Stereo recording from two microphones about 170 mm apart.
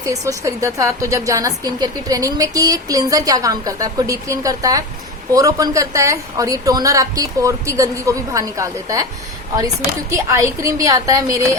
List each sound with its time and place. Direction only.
0.0 s a woman's voice: 20° right (ahead or behind)
10.1 s a woman's voice: 20° right (ahead or behind)